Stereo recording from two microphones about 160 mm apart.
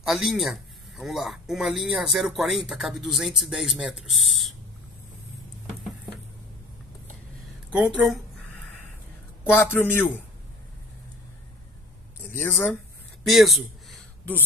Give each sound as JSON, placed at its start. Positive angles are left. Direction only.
{"t": 0.0, "sound": "speech", "side_deg": 0}
{"t": 7.7, "sound": "speech", "side_deg": -5}
{"t": 9.4, "sound": "a man's voice", "side_deg": 10}
{"t": 12.4, "sound": "a man's voice", "side_deg": 15}
{"t": 13.2, "sound": "a sound", "side_deg": 0}